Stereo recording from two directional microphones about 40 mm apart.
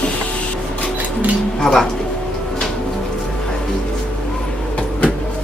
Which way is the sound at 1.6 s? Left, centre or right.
Centre.